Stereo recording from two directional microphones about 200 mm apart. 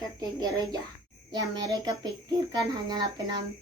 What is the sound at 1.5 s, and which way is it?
A child's voice, 20° right (ahead or behind).